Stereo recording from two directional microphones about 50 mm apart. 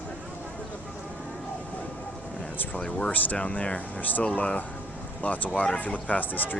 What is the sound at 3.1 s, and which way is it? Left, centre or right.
Speech, left.